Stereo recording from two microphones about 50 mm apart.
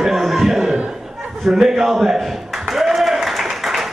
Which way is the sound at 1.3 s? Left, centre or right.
Centre.